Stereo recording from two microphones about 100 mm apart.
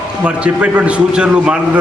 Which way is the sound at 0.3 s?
10° right (ahead or behind).